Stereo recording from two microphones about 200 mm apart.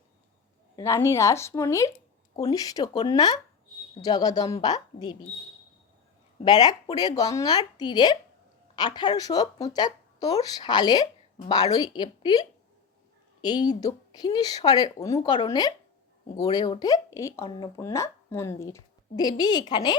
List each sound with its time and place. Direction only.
0.8 s speech: 15° left (ahead or behind)
6.4 s speech: 20° left (ahead or behind)